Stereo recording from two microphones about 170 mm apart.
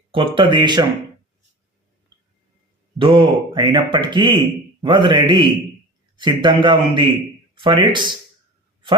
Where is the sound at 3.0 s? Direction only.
30° right (ahead or behind).